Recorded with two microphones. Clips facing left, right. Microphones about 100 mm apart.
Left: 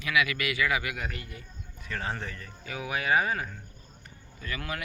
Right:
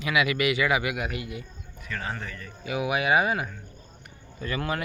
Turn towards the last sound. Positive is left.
turn(degrees=-35)  # may be behind; listen again after turning